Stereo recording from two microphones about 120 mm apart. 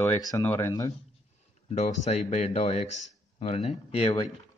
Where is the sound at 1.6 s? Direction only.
70° left (ahead or behind); by 4.2 s 55° left (ahead or behind).